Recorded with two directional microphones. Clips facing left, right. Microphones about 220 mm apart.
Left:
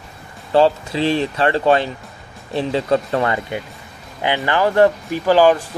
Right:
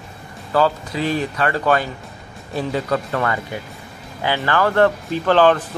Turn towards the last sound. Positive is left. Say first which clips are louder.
# left 1 dB
turn(degrees=10)  # may be behind; listen again after turning